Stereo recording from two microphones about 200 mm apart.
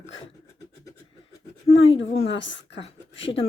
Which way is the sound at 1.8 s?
30° left (ahead or behind).